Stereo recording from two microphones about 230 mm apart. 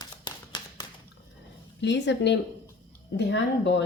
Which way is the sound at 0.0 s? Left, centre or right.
Centre.